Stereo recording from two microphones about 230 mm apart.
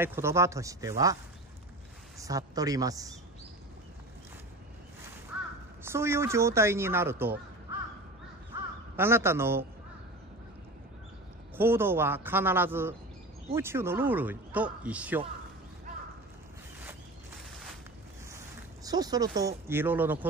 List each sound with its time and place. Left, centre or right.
0.0 s speech: centre
2.2 s speech: centre
5.3 s crow: centre
5.9 s speech: centre
8.9 s speech: centre
11.5 s speech: centre
18.9 s speech: centre